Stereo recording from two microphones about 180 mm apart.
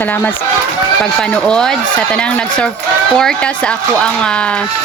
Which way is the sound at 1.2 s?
5° left (ahead or behind).